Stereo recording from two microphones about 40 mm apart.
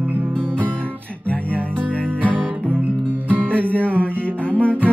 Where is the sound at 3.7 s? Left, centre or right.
Left.